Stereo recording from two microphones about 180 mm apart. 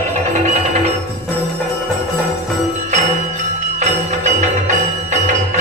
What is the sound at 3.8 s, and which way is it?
Music, 40° right (ahead or behind).